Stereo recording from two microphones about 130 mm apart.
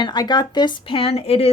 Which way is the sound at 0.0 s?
35° left (ahead or behind).